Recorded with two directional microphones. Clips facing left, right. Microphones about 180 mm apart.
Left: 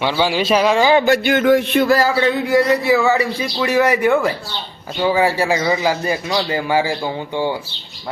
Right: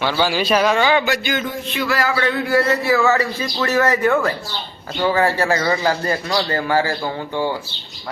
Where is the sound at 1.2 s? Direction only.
70° left (ahead or behind).